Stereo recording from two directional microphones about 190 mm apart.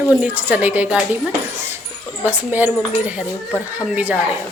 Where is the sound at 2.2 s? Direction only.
10° right (ahead or behind).